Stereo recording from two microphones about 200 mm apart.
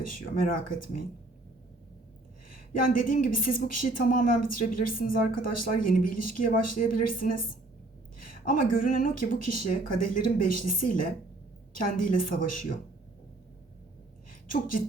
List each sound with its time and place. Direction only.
0.1 s speech: 45° left (ahead or behind)
2.8 s a woman's voice: 45° left (ahead or behind)
14.4 s a woman's voice: 40° left (ahead or behind)